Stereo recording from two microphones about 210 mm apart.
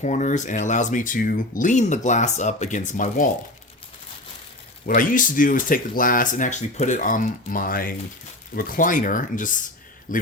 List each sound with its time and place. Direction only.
0.0 s speech: 35° left (ahead or behind)
4.9 s a man's voice: 40° left (ahead or behind)